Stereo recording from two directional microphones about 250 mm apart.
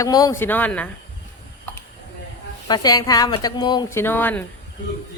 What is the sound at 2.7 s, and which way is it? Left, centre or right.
A woman's voice, centre.